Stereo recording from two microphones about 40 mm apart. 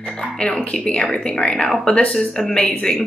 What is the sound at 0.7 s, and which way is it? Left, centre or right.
A woman's voice, left.